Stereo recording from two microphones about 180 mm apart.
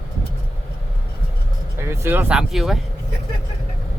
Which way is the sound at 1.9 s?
15° right (ahead or behind).